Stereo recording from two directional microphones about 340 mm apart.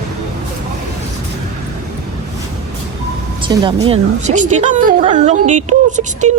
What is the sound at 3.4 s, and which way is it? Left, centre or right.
A woman's voice, centre.